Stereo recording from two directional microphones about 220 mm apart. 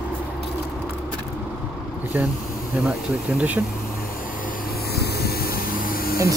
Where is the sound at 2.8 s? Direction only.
5° right (ahead or behind).